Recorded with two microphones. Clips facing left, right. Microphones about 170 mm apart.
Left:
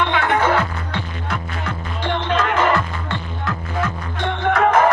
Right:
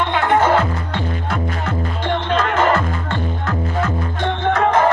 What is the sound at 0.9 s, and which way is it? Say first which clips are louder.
Music: right 3 dB; 45° right (ahead or behind).